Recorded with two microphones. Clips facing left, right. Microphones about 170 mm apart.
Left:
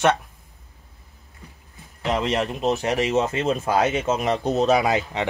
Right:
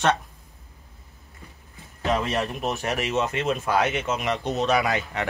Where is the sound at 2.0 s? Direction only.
20° left (ahead or behind).